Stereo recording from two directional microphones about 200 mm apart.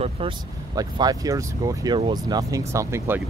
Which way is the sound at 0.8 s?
20° right (ahead or behind).